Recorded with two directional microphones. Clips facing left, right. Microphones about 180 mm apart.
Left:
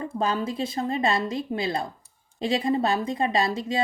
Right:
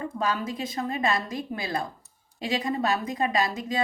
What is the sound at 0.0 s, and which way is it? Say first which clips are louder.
A woman's voice: left 2 dB; 30° left (ahead or behind).